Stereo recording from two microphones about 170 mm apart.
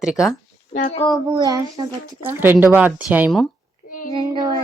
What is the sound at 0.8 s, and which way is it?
Speech, 45° left (ahead or behind).